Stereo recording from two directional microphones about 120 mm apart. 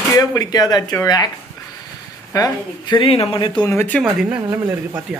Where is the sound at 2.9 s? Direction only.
55° left (ahead or behind).